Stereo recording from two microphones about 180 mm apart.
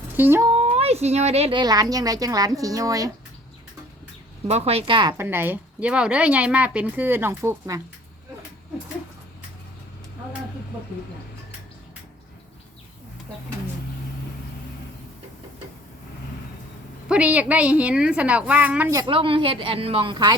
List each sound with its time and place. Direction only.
0.2 s speech: 15° right (ahead or behind)
0.5 s a woman's voice: 35° right (ahead or behind); by 3.1 s 20° right (ahead or behind)
4.4 s speech: 35° right (ahead or behind)
5.1 s speech: 10° right (ahead or behind)
17.1 s speech: 5° right (ahead or behind)
18.9 s a woman's voice: 25° right (ahead or behind)